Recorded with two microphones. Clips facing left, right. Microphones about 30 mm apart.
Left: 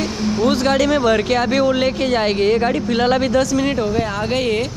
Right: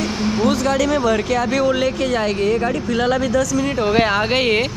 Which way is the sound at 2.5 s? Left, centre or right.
Left.